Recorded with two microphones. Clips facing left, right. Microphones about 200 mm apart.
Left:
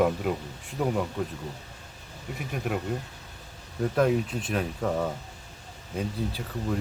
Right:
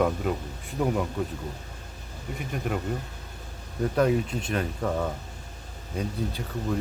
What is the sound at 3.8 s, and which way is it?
Speech, centre (ahead or behind).